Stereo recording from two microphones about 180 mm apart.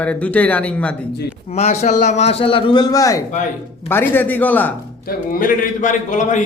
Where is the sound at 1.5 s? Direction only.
35° left (ahead or behind); by 4.7 s 10° left (ahead or behind).